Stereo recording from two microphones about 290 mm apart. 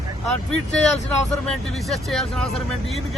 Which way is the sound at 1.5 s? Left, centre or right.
Centre.